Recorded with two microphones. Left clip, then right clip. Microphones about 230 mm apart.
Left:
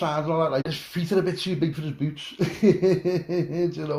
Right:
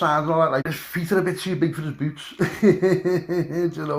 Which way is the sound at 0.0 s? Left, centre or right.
Right.